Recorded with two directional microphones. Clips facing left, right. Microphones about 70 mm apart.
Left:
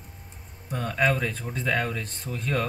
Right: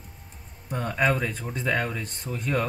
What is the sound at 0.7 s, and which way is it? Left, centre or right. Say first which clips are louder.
Speech: even; centre.